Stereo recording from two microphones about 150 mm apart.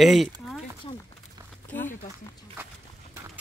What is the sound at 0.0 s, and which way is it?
Speech, centre (ahead or behind).